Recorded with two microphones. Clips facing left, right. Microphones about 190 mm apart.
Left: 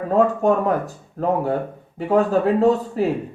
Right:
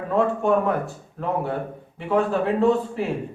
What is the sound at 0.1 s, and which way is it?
Speech, 40° left (ahead or behind).